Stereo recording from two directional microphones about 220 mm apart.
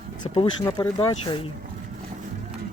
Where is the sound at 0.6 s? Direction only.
20° left (ahead or behind).